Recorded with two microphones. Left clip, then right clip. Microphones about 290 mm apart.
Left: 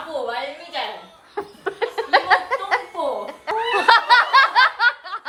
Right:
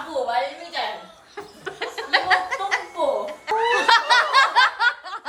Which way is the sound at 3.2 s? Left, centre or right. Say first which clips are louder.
Right 1 dB; centre.